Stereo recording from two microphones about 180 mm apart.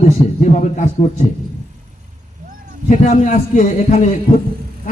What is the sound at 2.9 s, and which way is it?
A man's voice, 45° left (ahead or behind).